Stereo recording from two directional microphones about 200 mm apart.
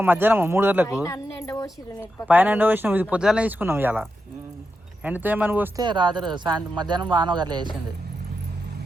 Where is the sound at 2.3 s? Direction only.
10° right (ahead or behind).